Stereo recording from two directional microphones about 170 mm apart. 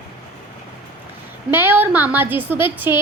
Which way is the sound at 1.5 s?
10° right (ahead or behind).